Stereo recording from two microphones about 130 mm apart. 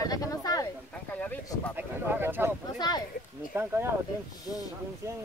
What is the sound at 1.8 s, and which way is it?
Speech, 15° right (ahead or behind).